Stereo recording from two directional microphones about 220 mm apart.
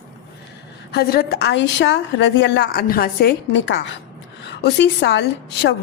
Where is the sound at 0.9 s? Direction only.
45° left (ahead or behind).